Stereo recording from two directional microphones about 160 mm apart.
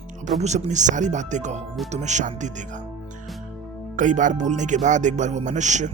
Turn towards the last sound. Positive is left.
turn(degrees=-50)  # may be behind; listen again after turning